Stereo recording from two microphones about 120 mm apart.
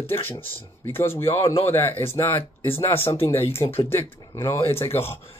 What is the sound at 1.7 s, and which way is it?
Speech, 20° left (ahead or behind).